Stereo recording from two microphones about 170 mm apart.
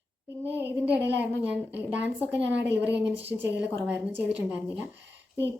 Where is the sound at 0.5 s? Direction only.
10° right (ahead or behind).